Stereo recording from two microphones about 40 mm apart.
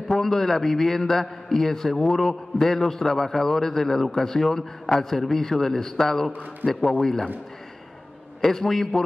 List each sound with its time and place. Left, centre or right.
0.1 s a man's voice: centre
6.6 s a man's voice: right
7.0 s a man's voice: centre
8.5 s a man's voice: centre